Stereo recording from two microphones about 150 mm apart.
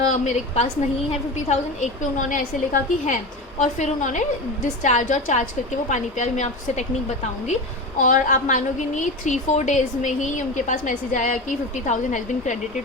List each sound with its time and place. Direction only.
0.1 s a woman's voice: 50° left (ahead or behind)